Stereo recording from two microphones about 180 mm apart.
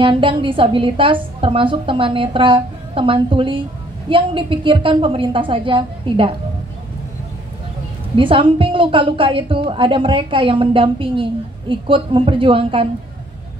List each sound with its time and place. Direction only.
0.0 s a woman's voice: 30° right (ahead or behind)
8.2 s a woman's voice: 30° right (ahead or behind)